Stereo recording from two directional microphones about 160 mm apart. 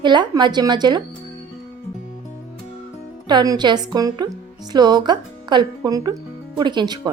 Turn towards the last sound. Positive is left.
turn(degrees=-25)  # may be behind; listen again after turning